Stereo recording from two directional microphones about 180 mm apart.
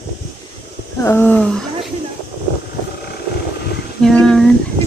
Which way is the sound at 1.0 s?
10° left (ahead or behind).